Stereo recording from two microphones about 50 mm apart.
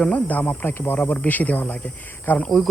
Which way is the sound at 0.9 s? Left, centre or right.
Left.